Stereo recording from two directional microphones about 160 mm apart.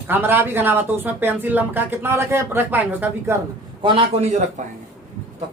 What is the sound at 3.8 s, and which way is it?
Speech, 35° right (ahead or behind).